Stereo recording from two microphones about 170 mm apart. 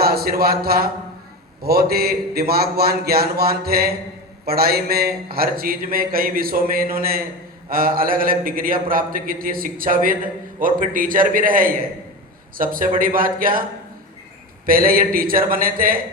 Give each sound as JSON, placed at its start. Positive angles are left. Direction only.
{"t": 0.0, "sound": "a man's voice", "side_deg": -65}
{"t": 14.7, "sound": "speech", "side_deg": -60}